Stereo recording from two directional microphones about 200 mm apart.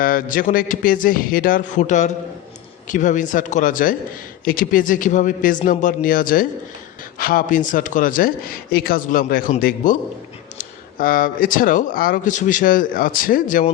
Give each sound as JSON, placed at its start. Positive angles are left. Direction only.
{"t": 0.0, "sound": "speech", "side_deg": 45}